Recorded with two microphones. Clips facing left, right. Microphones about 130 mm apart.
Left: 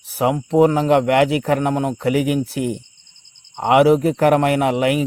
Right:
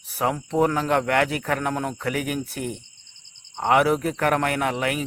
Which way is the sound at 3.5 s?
20° left (ahead or behind).